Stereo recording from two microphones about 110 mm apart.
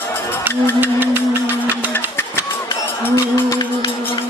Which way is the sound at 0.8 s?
20° right (ahead or behind).